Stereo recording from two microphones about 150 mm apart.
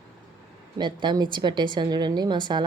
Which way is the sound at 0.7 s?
30° right (ahead or behind).